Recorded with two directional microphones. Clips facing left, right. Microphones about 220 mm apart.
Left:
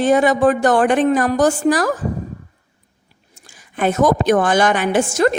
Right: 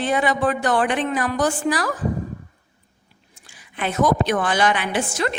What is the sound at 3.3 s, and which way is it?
A woman's voice, 45° left (ahead or behind).